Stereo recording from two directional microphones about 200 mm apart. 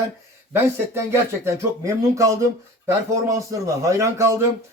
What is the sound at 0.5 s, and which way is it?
Speech, 15° right (ahead or behind).